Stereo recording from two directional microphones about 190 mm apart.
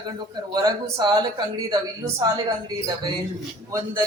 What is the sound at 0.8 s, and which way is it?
A woman's voice, 25° right (ahead or behind).